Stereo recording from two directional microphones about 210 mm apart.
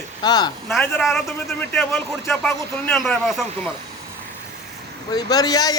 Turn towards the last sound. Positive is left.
turn(degrees=20)  # may be behind; listen again after turning